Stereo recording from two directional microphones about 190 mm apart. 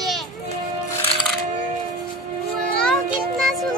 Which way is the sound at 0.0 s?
Centre (ahead or behind).